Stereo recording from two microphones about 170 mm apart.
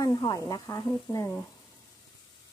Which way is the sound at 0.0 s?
20° left (ahead or behind).